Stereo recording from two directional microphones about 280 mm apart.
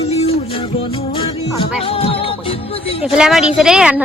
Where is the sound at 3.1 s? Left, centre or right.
Centre.